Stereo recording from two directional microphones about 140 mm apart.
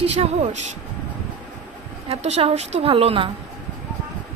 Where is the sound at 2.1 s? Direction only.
50° right (ahead or behind).